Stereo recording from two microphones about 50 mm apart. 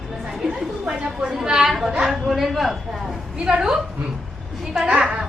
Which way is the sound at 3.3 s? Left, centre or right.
Centre.